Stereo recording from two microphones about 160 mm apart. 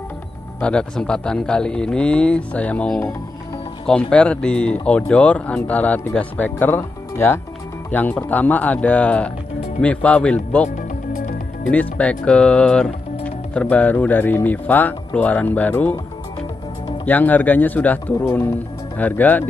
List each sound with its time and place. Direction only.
0.6 s a man's voice: 5° left (ahead or behind)
10.8 s music: 55° left (ahead or behind)
11.7 s speech: 10° left (ahead or behind)
17.0 s speech: 10° left (ahead or behind)